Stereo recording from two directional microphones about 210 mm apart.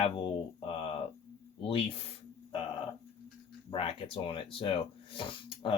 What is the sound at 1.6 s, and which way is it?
Speech, 25° left (ahead or behind).